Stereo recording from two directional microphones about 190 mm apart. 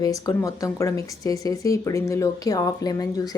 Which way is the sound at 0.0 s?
20° left (ahead or behind).